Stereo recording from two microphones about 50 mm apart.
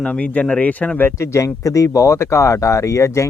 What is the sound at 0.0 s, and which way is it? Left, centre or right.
Speech, left.